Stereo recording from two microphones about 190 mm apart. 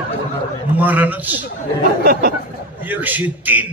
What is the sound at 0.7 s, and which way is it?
Speech, 10° right (ahead or behind).